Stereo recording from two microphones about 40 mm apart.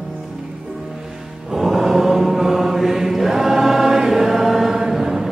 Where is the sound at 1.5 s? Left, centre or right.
Centre.